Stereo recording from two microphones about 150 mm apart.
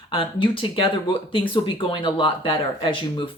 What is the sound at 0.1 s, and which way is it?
Speech, 35° left (ahead or behind).